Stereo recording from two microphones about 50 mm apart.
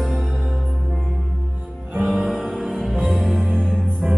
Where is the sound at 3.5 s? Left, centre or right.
Centre.